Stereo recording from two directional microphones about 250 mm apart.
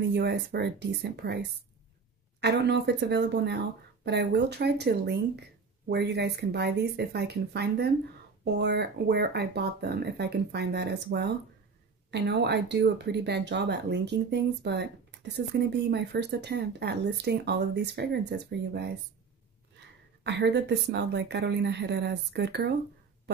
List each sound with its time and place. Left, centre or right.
0.1 s speech: right
2.4 s speech: right
20.2 s speech: right